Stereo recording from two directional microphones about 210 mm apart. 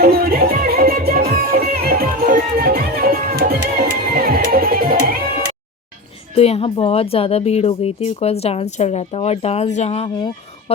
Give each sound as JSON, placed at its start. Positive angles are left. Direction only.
{"t": 0.0, "sound": "music", "side_deg": -45}
{"t": 6.3, "sound": "a woman's voice", "side_deg": 30}